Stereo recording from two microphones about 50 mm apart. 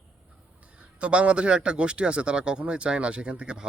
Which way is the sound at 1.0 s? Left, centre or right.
Right.